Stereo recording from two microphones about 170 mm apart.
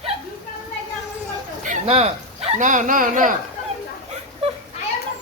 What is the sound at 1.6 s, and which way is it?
Speech, 40° right (ahead or behind).